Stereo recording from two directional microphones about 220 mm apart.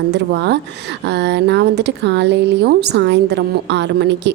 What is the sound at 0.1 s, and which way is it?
Speech, 50° right (ahead or behind).